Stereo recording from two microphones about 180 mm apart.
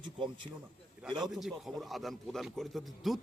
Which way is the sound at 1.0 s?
Centre (ahead or behind).